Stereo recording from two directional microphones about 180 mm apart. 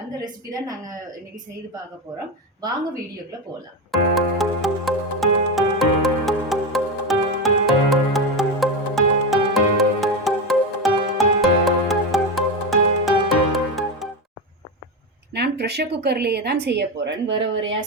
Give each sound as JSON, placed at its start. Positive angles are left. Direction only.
{"t": 3.9, "sound": "music", "side_deg": 0}
{"t": 15.3, "sound": "speech", "side_deg": -65}